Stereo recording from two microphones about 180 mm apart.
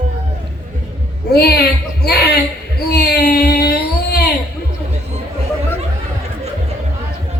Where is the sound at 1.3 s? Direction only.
60° left (ahead or behind).